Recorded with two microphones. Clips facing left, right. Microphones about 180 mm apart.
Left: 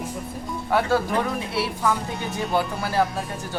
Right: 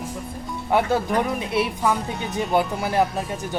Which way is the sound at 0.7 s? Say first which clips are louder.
Right 1 dB; 20° right (ahead or behind).